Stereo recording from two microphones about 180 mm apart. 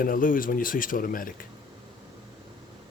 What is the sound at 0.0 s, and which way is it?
Speech, 50° left (ahead or behind).